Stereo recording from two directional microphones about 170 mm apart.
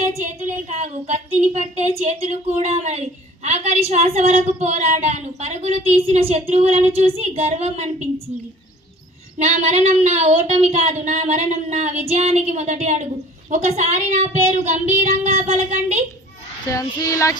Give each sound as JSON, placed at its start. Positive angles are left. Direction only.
{"t": 0.0, "sound": "a woman's voice", "side_deg": -45}
{"t": 9.4, "sound": "a woman's voice", "side_deg": -40}
{"t": 16.6, "sound": "child singing", "side_deg": 20}